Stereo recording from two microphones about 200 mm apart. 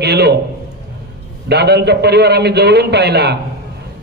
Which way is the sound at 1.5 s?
55° right (ahead or behind).